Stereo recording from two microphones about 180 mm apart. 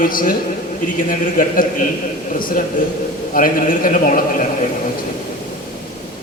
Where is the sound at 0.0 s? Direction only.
50° left (ahead or behind).